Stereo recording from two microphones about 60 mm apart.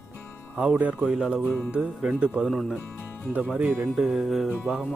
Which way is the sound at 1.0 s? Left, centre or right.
Centre.